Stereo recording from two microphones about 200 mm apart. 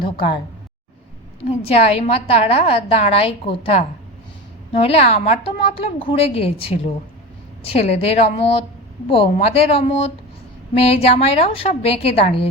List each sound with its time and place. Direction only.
0.0 s a woman's voice: 25° left (ahead or behind)
1.5 s a woman's voice: 30° left (ahead or behind)